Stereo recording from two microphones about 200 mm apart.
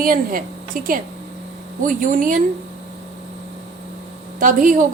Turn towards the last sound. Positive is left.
turn(degrees=-40)  # may be behind; listen again after turning